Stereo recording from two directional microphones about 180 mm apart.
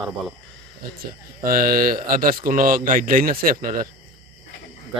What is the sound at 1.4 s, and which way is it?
Speech, 55° right (ahead or behind).